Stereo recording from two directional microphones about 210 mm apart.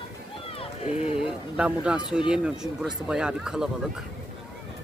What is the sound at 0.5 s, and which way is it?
Run, 25° left (ahead or behind).